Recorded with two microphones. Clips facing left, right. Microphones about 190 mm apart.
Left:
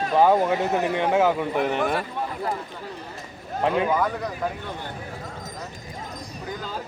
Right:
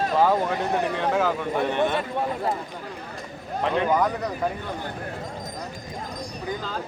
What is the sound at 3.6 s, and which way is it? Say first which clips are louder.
Speech: even; 5° left (ahead or behind).